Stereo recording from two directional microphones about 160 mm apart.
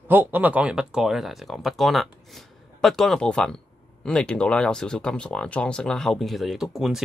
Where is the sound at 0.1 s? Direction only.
10° right (ahead or behind).